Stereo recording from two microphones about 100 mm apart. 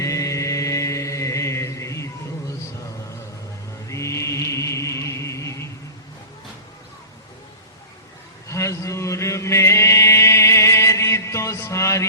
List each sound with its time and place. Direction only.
0.0 s chant: 30° left (ahead or behind)
3.8 s music: 30° left (ahead or behind)
8.4 s chant: 30° left (ahead or behind)